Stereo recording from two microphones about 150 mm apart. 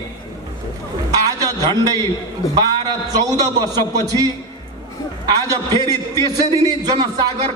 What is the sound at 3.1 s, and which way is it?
Speech, 25° right (ahead or behind).